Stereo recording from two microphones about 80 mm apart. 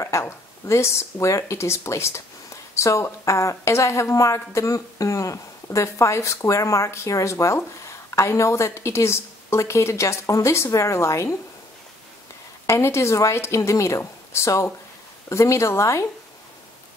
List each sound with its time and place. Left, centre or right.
0.0 s speech: left
12.6 s speech: left